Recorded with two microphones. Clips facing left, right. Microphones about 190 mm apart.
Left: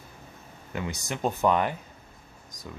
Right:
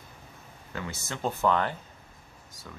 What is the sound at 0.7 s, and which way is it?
Speech, 15° left (ahead or behind).